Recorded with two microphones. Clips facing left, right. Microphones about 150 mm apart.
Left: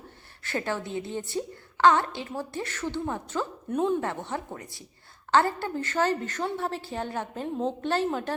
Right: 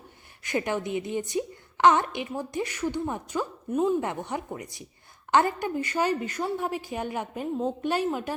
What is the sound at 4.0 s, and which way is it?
A woman's voice, 15° right (ahead or behind).